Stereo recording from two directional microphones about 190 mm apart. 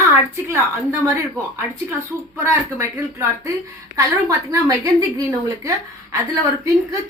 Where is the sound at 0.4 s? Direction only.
15° right (ahead or behind).